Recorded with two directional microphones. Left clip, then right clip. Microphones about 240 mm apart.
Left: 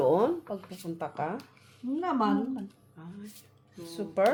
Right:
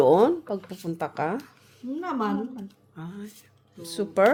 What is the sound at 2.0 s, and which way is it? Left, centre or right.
Speech, centre.